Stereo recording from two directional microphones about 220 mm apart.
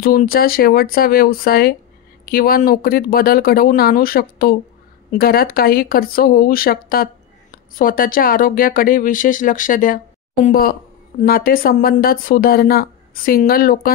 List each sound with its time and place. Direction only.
0.0 s speech: 40° left (ahead or behind)